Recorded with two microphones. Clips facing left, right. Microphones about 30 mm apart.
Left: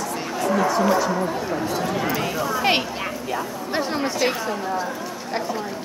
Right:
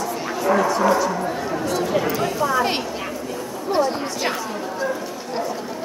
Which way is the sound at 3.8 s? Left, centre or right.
Centre.